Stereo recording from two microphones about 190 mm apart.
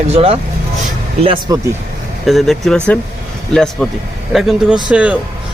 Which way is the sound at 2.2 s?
Centre (ahead or behind).